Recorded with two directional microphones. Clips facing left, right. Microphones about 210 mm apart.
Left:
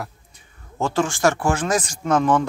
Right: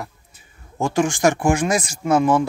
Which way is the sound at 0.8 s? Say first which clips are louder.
Right 2 dB; 15° right (ahead or behind).